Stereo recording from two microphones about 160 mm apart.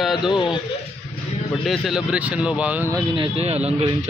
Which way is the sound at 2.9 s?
30° right (ahead or behind).